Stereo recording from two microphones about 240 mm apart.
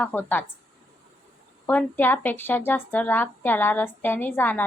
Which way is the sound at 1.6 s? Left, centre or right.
Centre.